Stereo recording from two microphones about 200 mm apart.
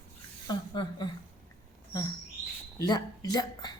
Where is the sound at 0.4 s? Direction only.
20° left (ahead or behind).